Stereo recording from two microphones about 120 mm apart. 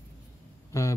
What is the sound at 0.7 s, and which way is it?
Hum, 25° left (ahead or behind).